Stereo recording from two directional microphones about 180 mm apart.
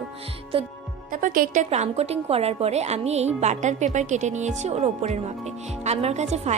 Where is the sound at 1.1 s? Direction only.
50° right (ahead or behind).